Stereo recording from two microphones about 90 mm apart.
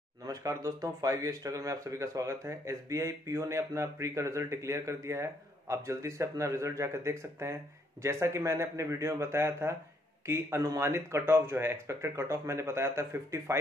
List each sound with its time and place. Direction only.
0.3 s speech: 40° right (ahead or behind)